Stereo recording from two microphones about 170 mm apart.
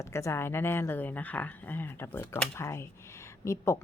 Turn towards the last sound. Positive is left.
turn(degrees=15)  # may be behind; listen again after turning